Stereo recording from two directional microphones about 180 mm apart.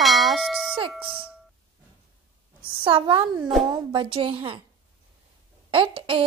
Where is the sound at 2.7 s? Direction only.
25° right (ahead or behind).